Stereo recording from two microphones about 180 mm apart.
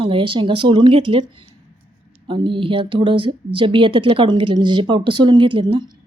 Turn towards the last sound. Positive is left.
turn(degrees=-25)  # may be behind; listen again after turning